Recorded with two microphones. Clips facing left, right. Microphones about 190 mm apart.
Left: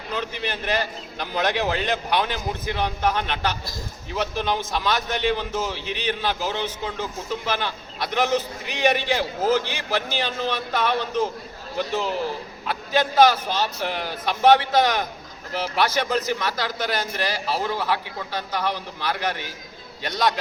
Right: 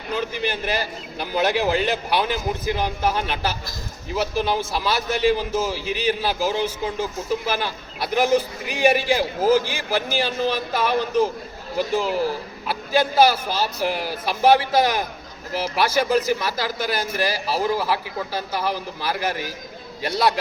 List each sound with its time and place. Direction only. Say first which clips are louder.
0.1 s a man's voice: right 4 dB; 5° right (ahead or behind)